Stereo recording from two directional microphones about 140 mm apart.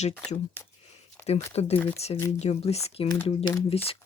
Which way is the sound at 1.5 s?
45° left (ahead or behind).